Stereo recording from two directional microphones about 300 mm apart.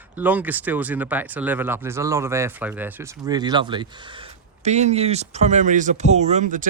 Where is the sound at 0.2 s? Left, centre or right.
Centre.